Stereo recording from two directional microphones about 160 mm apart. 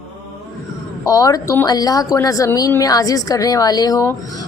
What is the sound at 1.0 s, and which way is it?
Speech, 20° left (ahead or behind).